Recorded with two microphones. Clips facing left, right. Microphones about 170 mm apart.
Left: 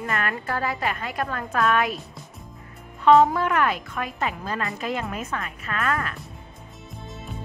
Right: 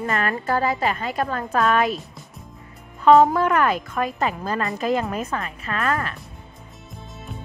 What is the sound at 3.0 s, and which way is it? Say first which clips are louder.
Speech: right 2 dB; 45° right (ahead or behind).